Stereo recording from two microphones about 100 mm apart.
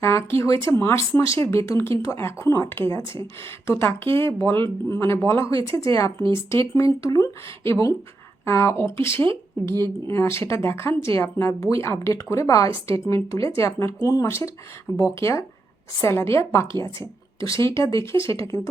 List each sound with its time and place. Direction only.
0.0 s speech: 30° left (ahead or behind)